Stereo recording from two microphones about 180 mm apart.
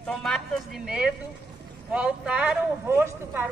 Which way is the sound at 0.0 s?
5° left (ahead or behind).